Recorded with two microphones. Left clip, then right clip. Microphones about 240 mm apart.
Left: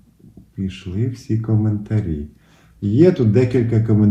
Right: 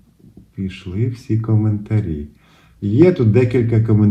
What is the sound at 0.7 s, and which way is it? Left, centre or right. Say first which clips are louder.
A man's voice: right 2 dB; right.